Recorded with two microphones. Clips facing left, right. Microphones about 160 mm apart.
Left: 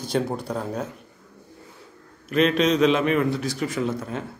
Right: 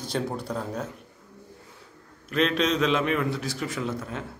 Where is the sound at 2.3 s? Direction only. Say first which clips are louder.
Left 4 dB; 5° left (ahead or behind).